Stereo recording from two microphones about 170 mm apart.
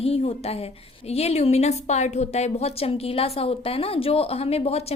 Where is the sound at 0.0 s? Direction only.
35° left (ahead or behind).